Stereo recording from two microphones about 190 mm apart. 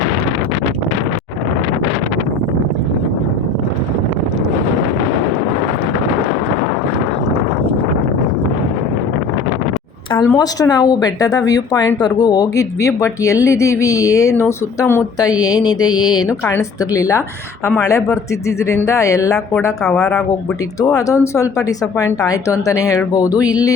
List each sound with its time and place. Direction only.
10.3 s a woman's voice: 20° left (ahead or behind)
19.8 s speech: 5° left (ahead or behind)
20.8 s a woman's voice: 15° left (ahead or behind)